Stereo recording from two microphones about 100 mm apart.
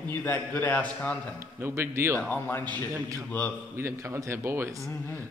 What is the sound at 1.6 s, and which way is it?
Speech, 25° right (ahead or behind).